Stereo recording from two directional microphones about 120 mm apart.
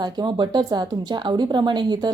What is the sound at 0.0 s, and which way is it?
Speech, 40° right (ahead or behind).